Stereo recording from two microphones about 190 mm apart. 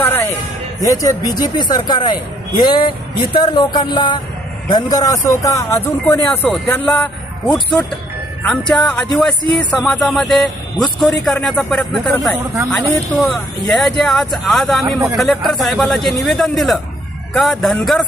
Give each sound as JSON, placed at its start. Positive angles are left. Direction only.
{"t": 0.0, "sound": "music", "side_deg": 10}
{"t": 0.8, "sound": "a man's voice", "side_deg": 20}
{"t": 13.1, "sound": "speech", "side_deg": 0}